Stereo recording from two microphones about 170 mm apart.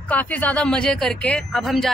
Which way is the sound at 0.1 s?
10° left (ahead or behind).